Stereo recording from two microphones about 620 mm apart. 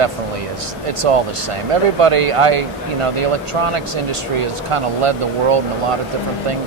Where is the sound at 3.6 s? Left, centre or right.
Right.